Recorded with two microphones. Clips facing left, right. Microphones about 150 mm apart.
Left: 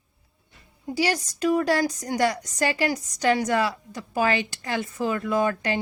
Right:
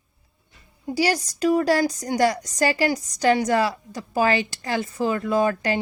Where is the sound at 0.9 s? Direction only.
35° right (ahead or behind).